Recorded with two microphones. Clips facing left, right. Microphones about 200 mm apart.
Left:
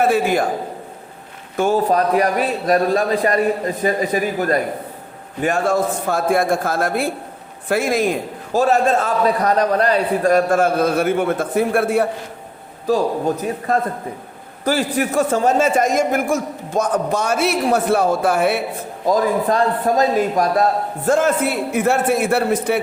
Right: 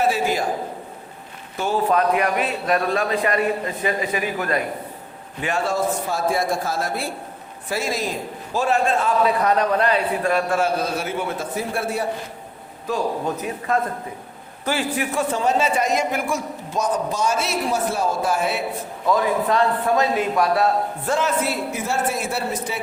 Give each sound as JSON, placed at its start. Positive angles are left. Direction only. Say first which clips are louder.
{"t": 0.0, "sound": "a man's voice", "louder": "left 5 dB", "side_deg": 55}
{"t": 1.5, "sound": "a man's voice", "louder": "left 4 dB", "side_deg": 45}
{"t": 8.5, "sound": "a man's voice", "louder": "left 5 dB", "side_deg": 40}
{"t": 12.9, "sound": "a man's voice", "louder": "left 6 dB", "side_deg": 35}
{"t": 19.0, "sound": "a man's voice", "louder": "left 3 dB", "side_deg": 40}